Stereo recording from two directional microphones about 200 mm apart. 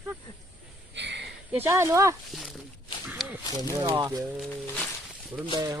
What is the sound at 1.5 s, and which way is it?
Speech, 15° right (ahead or behind).